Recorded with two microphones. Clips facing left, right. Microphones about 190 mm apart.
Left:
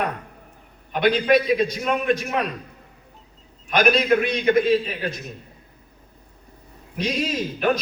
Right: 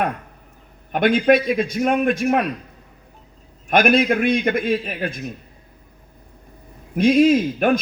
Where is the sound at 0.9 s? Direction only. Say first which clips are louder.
Right 3 dB; 50° right (ahead or behind).